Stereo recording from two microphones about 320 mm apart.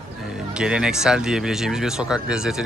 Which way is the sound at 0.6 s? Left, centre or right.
Centre.